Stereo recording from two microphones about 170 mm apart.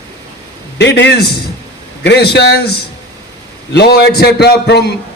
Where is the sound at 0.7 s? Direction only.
85° left.